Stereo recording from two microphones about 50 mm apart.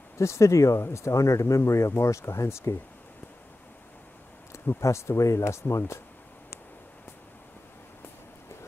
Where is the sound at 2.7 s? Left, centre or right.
Left.